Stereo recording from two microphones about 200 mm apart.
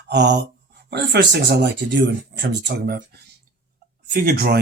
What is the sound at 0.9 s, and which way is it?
Speech, 55° right (ahead or behind).